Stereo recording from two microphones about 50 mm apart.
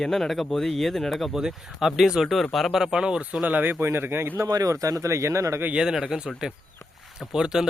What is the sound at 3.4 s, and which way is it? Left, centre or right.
Speech, right.